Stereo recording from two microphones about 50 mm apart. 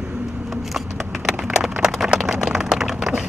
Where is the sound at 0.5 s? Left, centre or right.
Centre.